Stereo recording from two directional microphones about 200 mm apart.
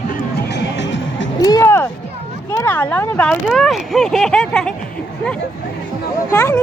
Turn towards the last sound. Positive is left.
turn(degrees=15)  # may be behind; listen again after turning